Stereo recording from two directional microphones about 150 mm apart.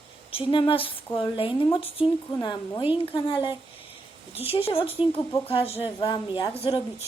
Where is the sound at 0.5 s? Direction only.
35° left (ahead or behind).